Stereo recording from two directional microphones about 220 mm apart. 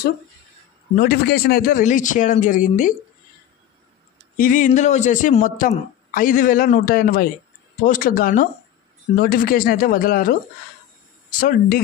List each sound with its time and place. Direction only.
0.9 s speech: 45° left (ahead or behind)
4.4 s speech: 40° left (ahead or behind)
11.3 s speech: 40° left (ahead or behind)